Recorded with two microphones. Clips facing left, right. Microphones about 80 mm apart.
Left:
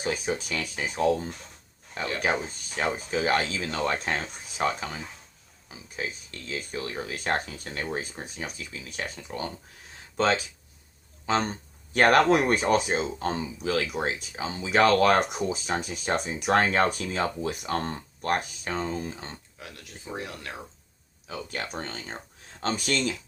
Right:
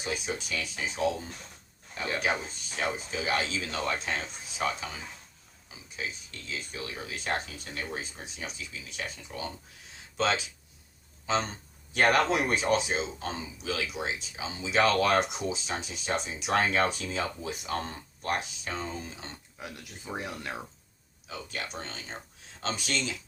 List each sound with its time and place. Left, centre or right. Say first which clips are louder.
0.0 s speech: left 5 dB; left
2.7 s speech: left 4 dB; left
3.9 s speech: left 4 dB; left
6.5 s speech: left 5 dB; left
11.9 s speech: left 5 dB; left
20.1 s speech: even; centre
21.2 s speech: left 4 dB; left